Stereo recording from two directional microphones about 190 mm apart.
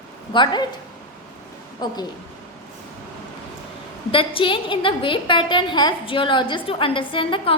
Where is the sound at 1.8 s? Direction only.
20° left (ahead or behind).